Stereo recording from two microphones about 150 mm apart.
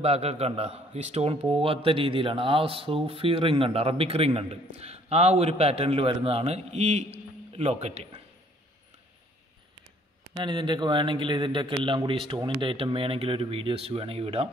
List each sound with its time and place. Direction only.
0.0 s a man's voice: 45° right (ahead or behind)
10.3 s a man's voice: 30° right (ahead or behind)